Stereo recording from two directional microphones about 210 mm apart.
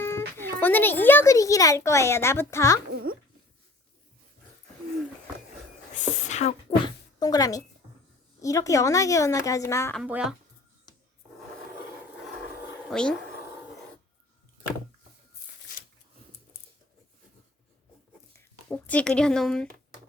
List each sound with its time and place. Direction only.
0.3 s a child's voice: 10° left (ahead or behind)
2.9 s a sound: 45° right (ahead or behind)
6.0 s a sound: 35° left (ahead or behind); by 7.6 s 15° left (ahead or behind)
8.4 s a child's voice: 15° left (ahead or behind)
10.0 s speech: 5° right (ahead or behind)
12.9 s speech: 5° left (ahead or behind)
18.3 s speech: 5° left (ahead or behind)